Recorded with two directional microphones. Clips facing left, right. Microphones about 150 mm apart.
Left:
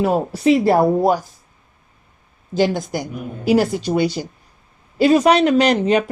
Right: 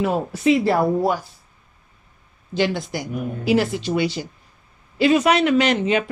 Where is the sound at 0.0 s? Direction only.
45° left (ahead or behind).